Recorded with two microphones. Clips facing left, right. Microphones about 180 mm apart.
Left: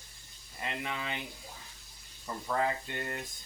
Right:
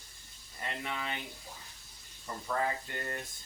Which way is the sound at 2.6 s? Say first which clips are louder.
Left 3 dB; 20° left (ahead or behind).